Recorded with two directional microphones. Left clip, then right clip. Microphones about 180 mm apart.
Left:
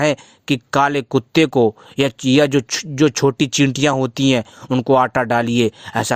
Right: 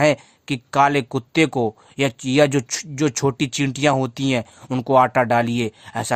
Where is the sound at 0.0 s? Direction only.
25° left (ahead or behind).